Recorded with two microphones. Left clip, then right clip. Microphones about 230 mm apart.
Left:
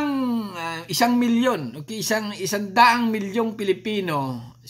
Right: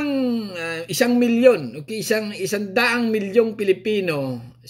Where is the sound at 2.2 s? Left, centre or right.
Centre.